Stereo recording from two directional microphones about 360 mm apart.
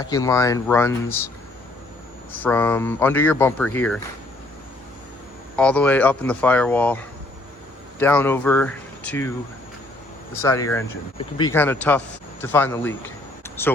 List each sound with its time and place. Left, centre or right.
0.0 s speech: centre
2.3 s speech: centre
5.5 s speech: centre
10.3 s speech: centre